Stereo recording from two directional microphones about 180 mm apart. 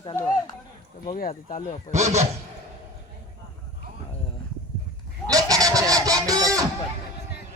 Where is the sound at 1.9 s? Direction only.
40° right (ahead or behind).